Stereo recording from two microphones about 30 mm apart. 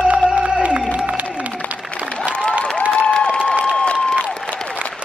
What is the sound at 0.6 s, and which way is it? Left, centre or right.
Crowd, right.